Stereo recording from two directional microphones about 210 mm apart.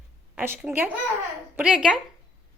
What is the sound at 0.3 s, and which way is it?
A woman's voice, 10° right (ahead or behind).